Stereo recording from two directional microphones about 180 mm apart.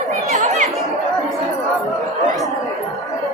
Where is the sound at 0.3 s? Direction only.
40° right (ahead or behind).